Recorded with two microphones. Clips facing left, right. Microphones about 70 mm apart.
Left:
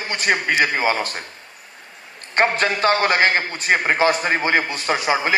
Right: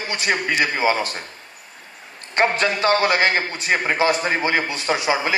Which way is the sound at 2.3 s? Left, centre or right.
Left.